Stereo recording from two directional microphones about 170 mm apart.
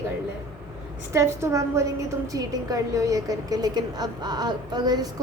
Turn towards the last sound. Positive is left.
turn(degrees=-25)  # may be behind; listen again after turning